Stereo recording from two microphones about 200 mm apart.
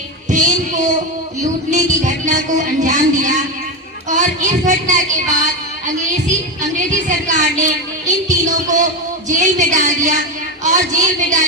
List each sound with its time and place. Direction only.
0.3 s child singing: 40° right (ahead or behind)
1.4 s a sound: 40° right (ahead or behind)
4.1 s music: 40° right (ahead or behind)